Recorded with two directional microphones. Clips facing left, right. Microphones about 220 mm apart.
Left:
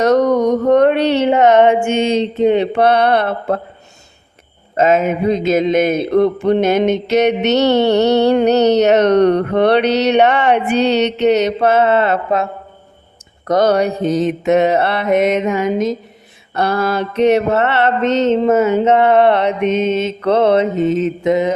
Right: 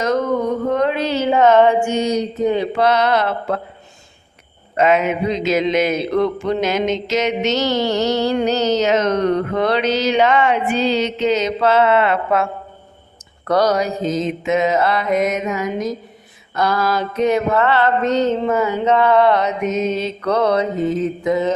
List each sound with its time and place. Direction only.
0.0 s a sound: 75° left (ahead or behind)
1.3 s mantra: 20° left (ahead or behind)
2.8 s speech: 60° left (ahead or behind)
4.8 s speech: 45° left (ahead or behind); by 11.4 s 65° left (ahead or behind)
11.7 s mantra: 45° left (ahead or behind)
13.7 s speech: 60° left (ahead or behind)
14.9 s mantra: 25° left (ahead or behind)
16.6 s speech: 60° left (ahead or behind)
17.5 s mantra: 25° left (ahead or behind)